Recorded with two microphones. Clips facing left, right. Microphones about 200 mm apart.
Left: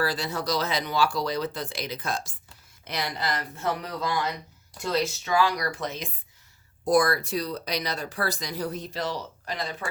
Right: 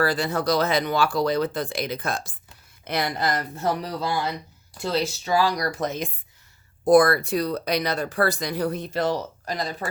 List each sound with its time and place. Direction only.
0.0 s speech: 55° right (ahead or behind); by 9.7 s 40° right (ahead or behind)